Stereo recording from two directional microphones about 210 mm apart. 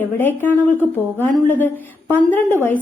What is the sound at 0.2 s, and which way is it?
A woman's voice, 10° left (ahead or behind).